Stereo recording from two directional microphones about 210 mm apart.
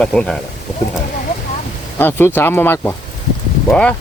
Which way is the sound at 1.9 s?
10° left (ahead or behind).